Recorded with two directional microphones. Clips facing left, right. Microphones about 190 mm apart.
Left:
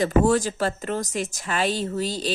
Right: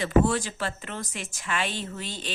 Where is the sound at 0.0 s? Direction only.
40° left (ahead or behind).